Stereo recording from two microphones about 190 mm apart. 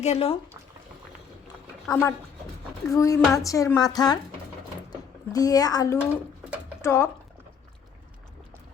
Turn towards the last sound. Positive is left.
turn(degrees=15)  # may be behind; listen again after turning